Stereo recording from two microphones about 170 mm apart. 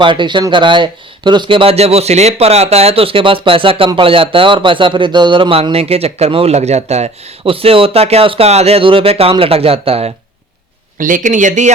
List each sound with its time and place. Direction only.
0.0 s speech: 30° right (ahead or behind)
11.0 s speech: 50° right (ahead or behind)